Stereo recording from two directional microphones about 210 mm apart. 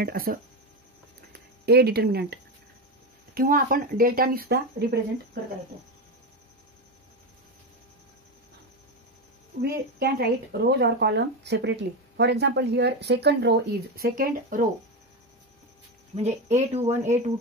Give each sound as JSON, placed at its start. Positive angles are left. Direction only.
{"t": 0.0, "sound": "speech", "side_deg": -45}
{"t": 1.7, "sound": "speech", "side_deg": -50}
{"t": 9.6, "sound": "speech", "side_deg": -50}
{"t": 16.2, "sound": "speech", "side_deg": -30}